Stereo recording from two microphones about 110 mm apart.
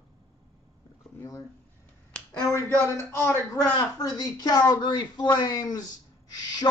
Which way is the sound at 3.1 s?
25° left (ahead or behind).